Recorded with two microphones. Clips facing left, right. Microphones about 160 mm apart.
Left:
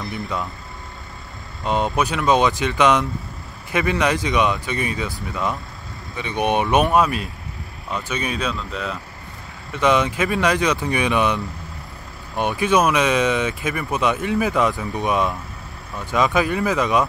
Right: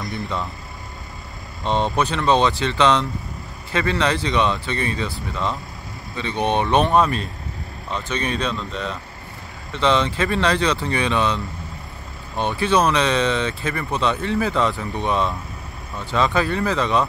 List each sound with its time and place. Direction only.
0.1 s speech: 5° left (ahead or behind)
1.6 s speech: 5° left (ahead or behind)